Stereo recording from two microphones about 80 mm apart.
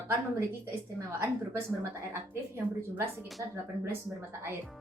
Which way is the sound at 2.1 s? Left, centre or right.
Right.